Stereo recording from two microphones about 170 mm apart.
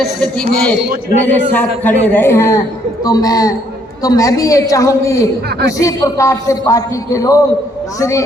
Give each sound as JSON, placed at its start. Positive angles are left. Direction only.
{"t": 0.0, "sound": "a man's voice", "side_deg": 5}